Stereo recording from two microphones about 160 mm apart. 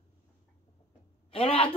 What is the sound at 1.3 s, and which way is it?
Speech, 35° left (ahead or behind).